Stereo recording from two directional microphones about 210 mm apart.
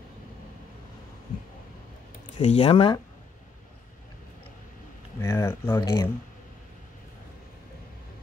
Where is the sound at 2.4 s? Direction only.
30° left (ahead or behind).